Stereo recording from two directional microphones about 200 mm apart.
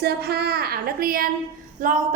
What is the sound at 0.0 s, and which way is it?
A woman's voice, 55° right (ahead or behind).